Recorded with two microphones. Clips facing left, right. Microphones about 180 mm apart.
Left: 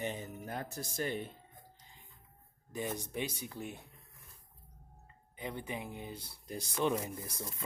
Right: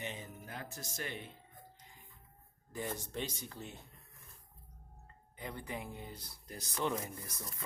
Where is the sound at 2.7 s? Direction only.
15° left (ahead or behind).